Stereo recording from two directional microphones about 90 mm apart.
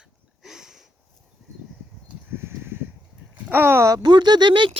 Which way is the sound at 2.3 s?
25° right (ahead or behind).